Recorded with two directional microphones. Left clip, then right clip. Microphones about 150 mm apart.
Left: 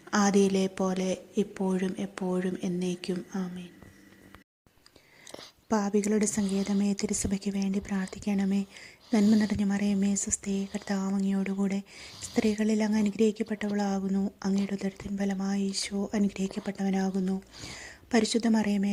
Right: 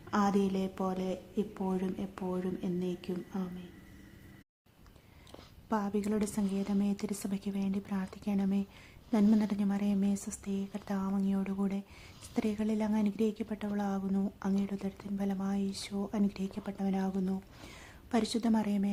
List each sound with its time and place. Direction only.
0.1 s a woman's voice: 10° left (ahead or behind)
5.6 s a woman's voice: 25° left (ahead or behind)